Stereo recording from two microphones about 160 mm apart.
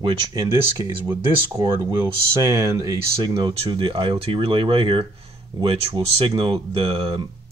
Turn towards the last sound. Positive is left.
turn(degrees=-35)  # may be behind; listen again after turning